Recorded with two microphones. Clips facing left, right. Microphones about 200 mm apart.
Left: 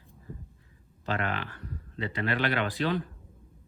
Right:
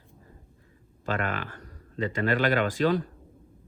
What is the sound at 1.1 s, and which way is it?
Speech, 45° right (ahead or behind).